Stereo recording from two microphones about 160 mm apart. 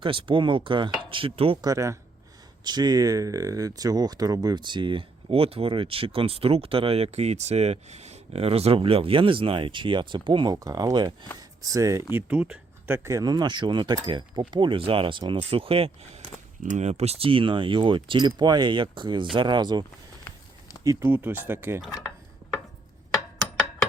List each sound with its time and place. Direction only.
0.0 s speech: 35° right (ahead or behind)
1.6 s speech: 20° right (ahead or behind)
12.1 s speech: 5° right (ahead or behind)
13.1 s speech: 20° right (ahead or behind)
16.6 s speech: 45° right (ahead or behind); by 19.8 s 30° right (ahead or behind)
20.8 s speech: 20° right (ahead or behind)